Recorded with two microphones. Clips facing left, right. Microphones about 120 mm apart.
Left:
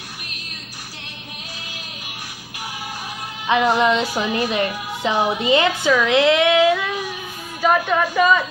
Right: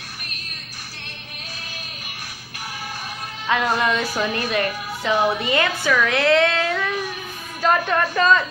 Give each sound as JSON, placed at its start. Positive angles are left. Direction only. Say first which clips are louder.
{"t": 3.4, "sound": "speech", "louder": "left 4 dB", "side_deg": 15}